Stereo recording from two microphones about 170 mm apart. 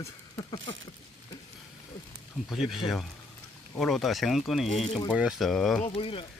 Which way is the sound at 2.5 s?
Centre (ahead or behind).